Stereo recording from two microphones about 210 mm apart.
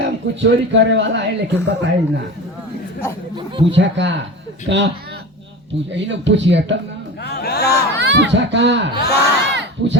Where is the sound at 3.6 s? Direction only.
60° right (ahead or behind).